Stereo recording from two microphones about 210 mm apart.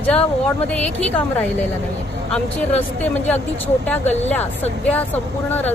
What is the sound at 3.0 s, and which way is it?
Speech, 5° left (ahead or behind).